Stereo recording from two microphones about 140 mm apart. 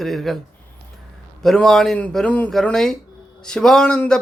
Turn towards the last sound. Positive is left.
turn(degrees=5)  # may be behind; listen again after turning